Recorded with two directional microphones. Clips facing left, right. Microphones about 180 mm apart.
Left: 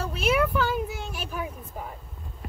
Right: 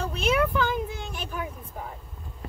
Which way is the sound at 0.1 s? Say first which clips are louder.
Left 1 dB; 5° left (ahead or behind).